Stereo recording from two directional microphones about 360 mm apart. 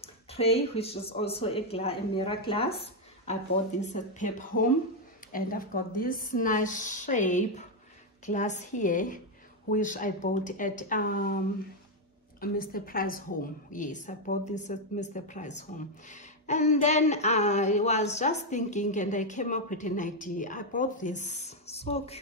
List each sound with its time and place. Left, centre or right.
0.0 s speech: centre
3.8 s speech: centre